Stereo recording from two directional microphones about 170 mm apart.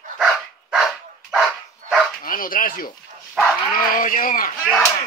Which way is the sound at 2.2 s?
55° left (ahead or behind).